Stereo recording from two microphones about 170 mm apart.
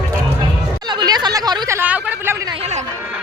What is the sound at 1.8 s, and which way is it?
Speech, 10° right (ahead or behind).